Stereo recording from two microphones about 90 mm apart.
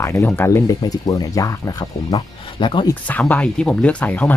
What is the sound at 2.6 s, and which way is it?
Speech, 65° left (ahead or behind).